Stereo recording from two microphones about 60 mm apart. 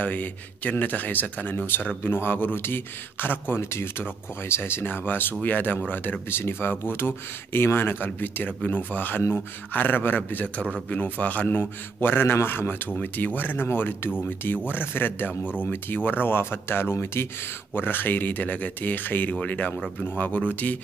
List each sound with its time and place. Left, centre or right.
0.0 s a man's voice: left
4.8 s a man's voice: left
17.7 s a man's voice: left